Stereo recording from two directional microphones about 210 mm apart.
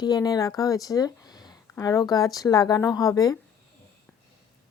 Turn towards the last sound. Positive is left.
turn(degrees=15)  # may be behind; listen again after turning